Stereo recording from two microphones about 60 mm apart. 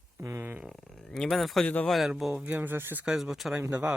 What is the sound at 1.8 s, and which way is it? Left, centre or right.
Speech, centre.